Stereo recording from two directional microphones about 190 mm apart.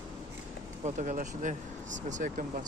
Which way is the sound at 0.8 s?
40° right (ahead or behind).